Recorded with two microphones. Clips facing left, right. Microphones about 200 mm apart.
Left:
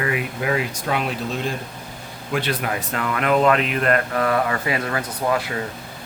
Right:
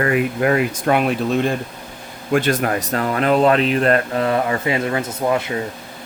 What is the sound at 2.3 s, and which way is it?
Speech, 45° right (ahead or behind).